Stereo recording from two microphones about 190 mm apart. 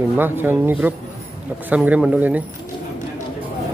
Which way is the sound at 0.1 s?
10° right (ahead or behind).